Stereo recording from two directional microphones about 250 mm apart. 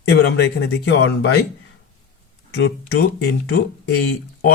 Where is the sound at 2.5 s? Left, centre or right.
Left.